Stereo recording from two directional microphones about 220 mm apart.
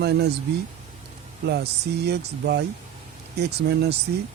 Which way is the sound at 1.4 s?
50° right (ahead or behind).